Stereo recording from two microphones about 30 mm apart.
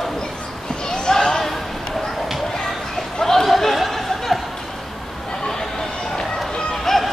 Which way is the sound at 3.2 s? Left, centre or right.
Centre.